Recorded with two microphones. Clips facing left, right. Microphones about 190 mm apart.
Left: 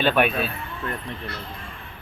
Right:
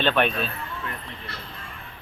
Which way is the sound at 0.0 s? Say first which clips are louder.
Left 2 dB; 10° left (ahead or behind).